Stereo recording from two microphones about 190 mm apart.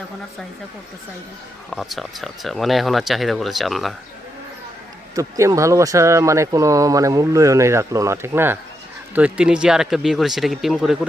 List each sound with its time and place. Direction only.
1.7 s speech: centre (ahead or behind)
5.1 s speech: 15° right (ahead or behind)